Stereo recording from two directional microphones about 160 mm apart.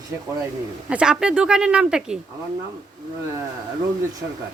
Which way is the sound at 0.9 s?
5° right (ahead or behind).